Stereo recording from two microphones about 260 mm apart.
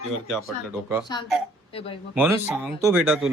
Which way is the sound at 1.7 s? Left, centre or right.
Left.